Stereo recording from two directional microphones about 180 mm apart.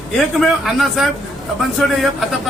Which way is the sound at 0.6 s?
Centre (ahead or behind).